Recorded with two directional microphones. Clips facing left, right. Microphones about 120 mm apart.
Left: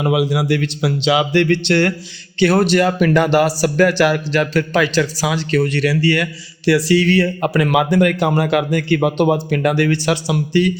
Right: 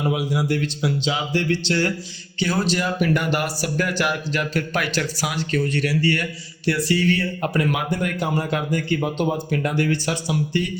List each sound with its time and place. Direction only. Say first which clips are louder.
0.0 s speech: left 6 dB; 90° left